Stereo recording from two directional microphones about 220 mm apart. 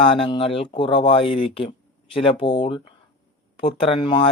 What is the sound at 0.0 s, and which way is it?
Speech, 25° left (ahead or behind).